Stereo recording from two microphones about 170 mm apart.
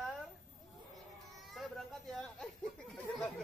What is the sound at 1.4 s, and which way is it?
Speech, centre (ahead or behind).